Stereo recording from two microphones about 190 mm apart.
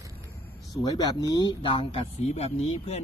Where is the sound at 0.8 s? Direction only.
20° left (ahead or behind).